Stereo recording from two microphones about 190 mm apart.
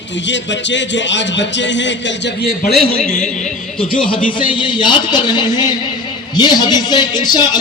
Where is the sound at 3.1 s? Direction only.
40° left (ahead or behind).